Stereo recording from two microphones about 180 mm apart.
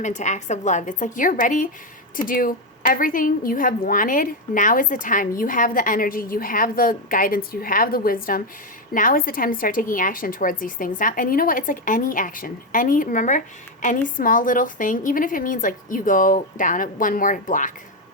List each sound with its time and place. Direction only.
0.0 s a woman's voice: 40° left (ahead or behind)